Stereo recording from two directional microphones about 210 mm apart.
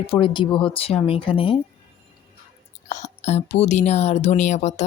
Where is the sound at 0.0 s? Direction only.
25° left (ahead or behind).